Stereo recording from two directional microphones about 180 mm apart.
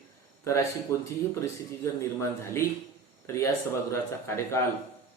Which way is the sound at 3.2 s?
15° left (ahead or behind).